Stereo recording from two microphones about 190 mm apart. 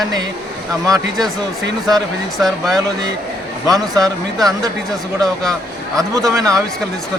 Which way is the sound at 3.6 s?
20° right (ahead or behind).